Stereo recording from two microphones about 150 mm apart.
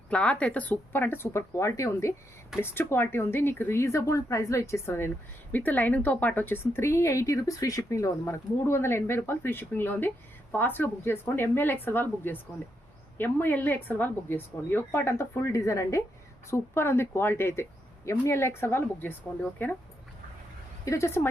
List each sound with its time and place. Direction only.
0.1 s a woman's voice: 10° left (ahead or behind)
20.8 s speech: 20° left (ahead or behind)